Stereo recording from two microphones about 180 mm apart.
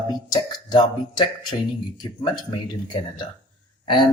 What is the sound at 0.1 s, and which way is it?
Speech, 20° left (ahead or behind).